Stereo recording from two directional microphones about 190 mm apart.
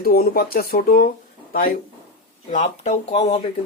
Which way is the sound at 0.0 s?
50° left (ahead or behind).